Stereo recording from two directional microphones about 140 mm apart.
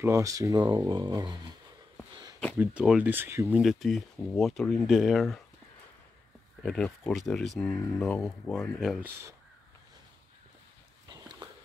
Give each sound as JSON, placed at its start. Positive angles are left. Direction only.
{"t": 0.0, "sound": "speech", "side_deg": -20}
{"t": 2.6, "sound": "speech", "side_deg": -10}
{"t": 3.6, "sound": "speech", "side_deg": 0}
{"t": 6.6, "sound": "speech", "side_deg": 5}
{"t": 11.1, "sound": "a sound", "side_deg": -30}